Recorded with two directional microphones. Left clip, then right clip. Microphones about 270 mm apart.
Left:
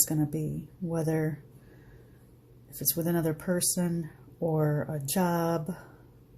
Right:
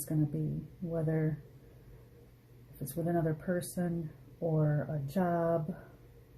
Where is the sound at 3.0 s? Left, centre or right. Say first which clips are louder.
Left 2 dB; left.